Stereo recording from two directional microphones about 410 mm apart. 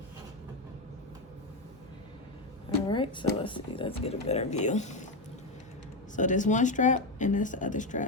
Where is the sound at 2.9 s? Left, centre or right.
Centre.